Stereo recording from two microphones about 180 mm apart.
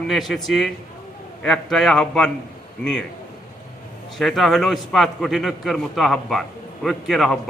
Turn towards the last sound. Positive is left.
turn(degrees=0)  # may be behind; listen again after turning